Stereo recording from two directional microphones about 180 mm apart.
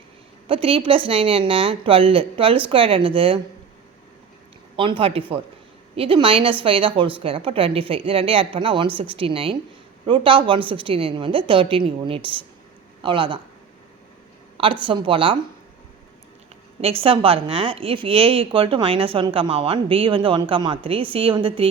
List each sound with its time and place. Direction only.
0.4 s a woman's voice: 30° right (ahead or behind)
4.8 s a woman's voice: 30° right (ahead or behind)
14.6 s a woman's voice: 30° right (ahead or behind)
16.8 s a woman's voice: 30° right (ahead or behind)